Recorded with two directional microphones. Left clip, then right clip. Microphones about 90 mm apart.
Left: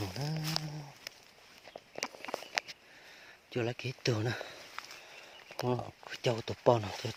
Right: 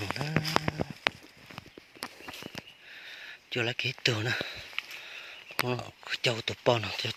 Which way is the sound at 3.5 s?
5° left (ahead or behind).